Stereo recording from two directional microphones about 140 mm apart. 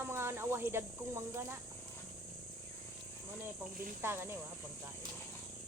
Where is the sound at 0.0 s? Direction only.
20° right (ahead or behind).